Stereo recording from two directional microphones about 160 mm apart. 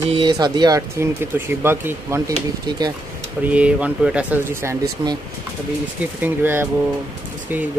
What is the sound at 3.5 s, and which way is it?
Speech, 10° right (ahead or behind).